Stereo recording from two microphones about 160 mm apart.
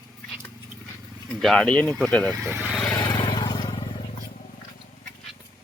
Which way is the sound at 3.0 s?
25° left (ahead or behind).